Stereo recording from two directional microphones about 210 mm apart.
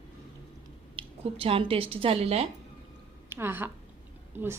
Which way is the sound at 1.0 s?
25° right (ahead or behind).